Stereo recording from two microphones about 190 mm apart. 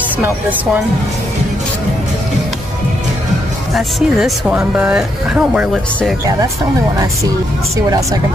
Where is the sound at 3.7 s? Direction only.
Centre (ahead or behind).